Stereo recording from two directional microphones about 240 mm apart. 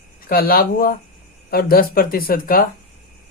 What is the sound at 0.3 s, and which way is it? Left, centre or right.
Speech, left.